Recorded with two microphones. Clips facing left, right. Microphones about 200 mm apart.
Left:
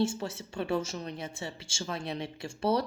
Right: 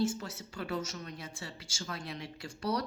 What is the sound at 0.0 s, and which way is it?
Speech, 25° left (ahead or behind).